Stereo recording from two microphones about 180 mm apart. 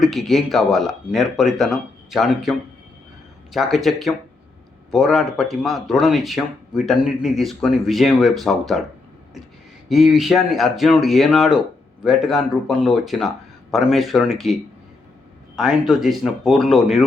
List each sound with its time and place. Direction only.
0.0 s speech: centre (ahead or behind)
9.9 s speech: centre (ahead or behind)